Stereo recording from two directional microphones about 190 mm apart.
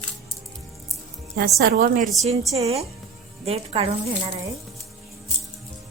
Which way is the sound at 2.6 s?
35° right (ahead or behind).